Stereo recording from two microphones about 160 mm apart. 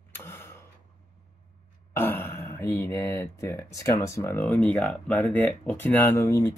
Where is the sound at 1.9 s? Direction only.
15° left (ahead or behind).